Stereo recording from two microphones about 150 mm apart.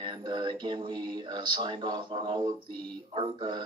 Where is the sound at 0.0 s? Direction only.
30° right (ahead or behind).